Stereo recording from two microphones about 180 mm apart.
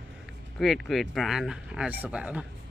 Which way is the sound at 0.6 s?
Centre (ahead or behind).